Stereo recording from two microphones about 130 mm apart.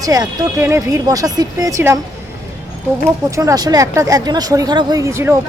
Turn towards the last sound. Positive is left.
turn(degrees=-20)  # may be behind; listen again after turning